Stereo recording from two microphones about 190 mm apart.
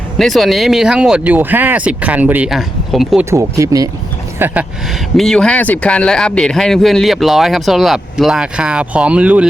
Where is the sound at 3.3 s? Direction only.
15° right (ahead or behind).